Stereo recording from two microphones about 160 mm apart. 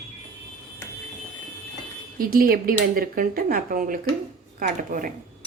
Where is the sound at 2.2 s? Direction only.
65° right (ahead or behind).